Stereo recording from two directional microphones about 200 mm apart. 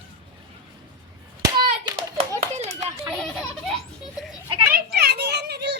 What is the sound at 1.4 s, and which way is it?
Hands, 20° right (ahead or behind).